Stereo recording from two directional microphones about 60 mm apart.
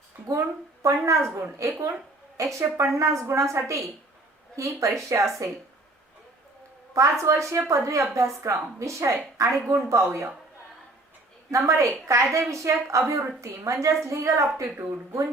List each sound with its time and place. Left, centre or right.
0.3 s a woman's voice: right
6.9 s a woman's voice: right
11.5 s a woman's voice: right